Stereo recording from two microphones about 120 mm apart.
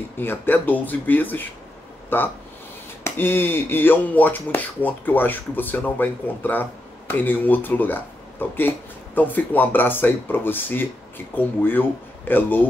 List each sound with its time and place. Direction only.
0.2 s speech: 15° left (ahead or behind)